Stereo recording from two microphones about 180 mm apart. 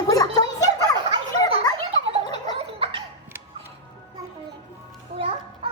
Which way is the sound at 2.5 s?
30° right (ahead or behind).